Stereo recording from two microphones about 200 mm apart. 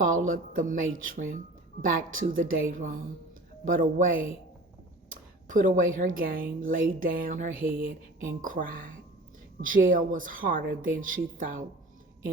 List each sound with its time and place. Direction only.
0.0 s speech: 45° right (ahead or behind)
5.5 s speech: 45° right (ahead or behind)